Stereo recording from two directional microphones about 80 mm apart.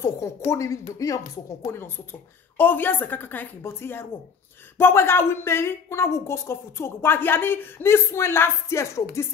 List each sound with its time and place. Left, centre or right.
0.0 s a woman's voice: left
2.5 s a woman's voice: left